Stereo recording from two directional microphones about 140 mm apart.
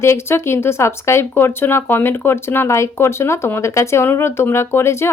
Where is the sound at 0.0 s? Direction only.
20° left (ahead or behind).